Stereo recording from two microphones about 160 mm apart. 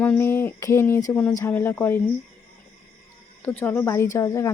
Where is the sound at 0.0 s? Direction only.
10° left (ahead or behind).